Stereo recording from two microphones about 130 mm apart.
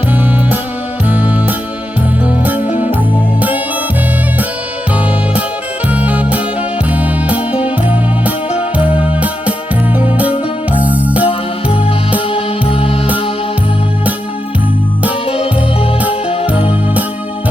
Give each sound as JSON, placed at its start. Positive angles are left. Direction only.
{"t": 1.0, "sound": "music", "side_deg": -10}
{"t": 5.9, "sound": "music", "side_deg": -10}
{"t": 10.8, "sound": "music", "side_deg": -10}
{"t": 12.3, "sound": "music", "side_deg": 50}